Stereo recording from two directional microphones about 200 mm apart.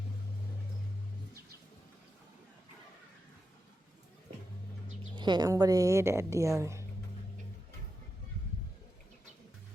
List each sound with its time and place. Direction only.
5.1 s a woman's voice: 20° right (ahead or behind)